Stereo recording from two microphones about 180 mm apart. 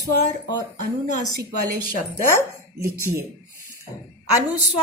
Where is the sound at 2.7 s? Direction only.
15° right (ahead or behind).